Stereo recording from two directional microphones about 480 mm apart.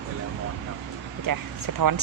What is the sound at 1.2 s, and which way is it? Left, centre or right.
Speech, right.